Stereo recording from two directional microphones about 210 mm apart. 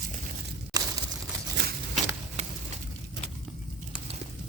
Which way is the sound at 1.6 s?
55° right (ahead or behind).